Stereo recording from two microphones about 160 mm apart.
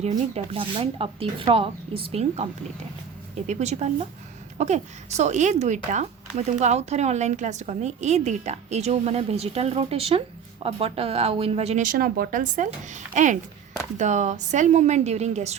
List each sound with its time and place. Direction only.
0.0 s speech: 35° right (ahead or behind)
11.9 s speech: 65° right (ahead or behind); by 15.5 s 45° right (ahead or behind)